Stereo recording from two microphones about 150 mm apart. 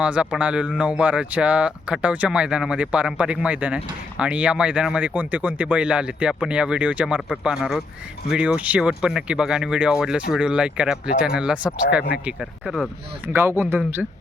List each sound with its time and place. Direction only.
0.0 s speech: 5° right (ahead or behind)
13.2 s speech: 15° right (ahead or behind)